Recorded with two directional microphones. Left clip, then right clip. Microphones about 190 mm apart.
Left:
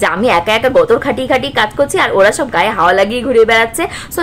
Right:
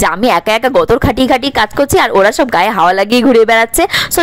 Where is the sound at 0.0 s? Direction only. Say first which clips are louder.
Right 1 dB; 55° right (ahead or behind).